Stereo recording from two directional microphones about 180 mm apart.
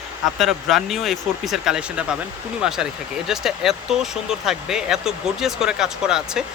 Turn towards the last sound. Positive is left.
turn(degrees=-5)  # may be behind; listen again after turning